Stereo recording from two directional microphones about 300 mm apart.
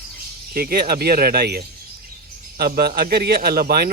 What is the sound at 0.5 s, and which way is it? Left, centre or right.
Speech, right.